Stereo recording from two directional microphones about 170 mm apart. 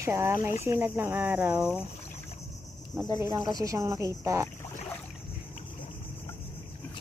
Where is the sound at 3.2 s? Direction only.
20° right (ahead or behind).